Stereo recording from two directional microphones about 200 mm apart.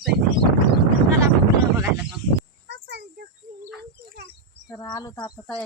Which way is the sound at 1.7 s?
5° right (ahead or behind).